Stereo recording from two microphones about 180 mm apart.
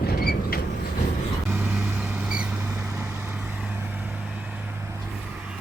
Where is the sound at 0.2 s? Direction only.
55° left (ahead or behind).